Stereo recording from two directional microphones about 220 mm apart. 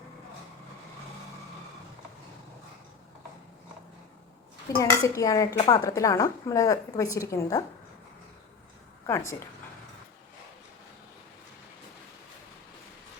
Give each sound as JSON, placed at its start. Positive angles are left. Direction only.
{"t": 4.8, "sound": "a woman's voice", "side_deg": 15}
{"t": 9.0, "sound": "a woman's voice", "side_deg": 10}